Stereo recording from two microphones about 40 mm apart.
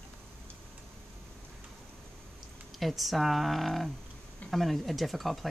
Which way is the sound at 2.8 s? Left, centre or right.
Centre.